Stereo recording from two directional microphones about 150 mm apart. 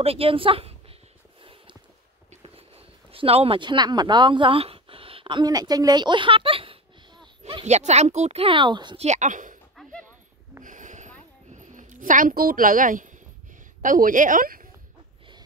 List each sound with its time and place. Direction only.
0.0 s a woman's voice: 40° right (ahead or behind)
1.4 s a sound: 35° right (ahead or behind)
2.4 s speech: 40° right (ahead or behind)
7.6 s speech: 45° right (ahead or behind); by 9.0 s 30° right (ahead or behind)
9.0 s a woman's voice: 50° right (ahead or behind)
10.6 s a sound: 60° right (ahead or behind)
11.5 s a woman's voice: 60° right (ahead or behind)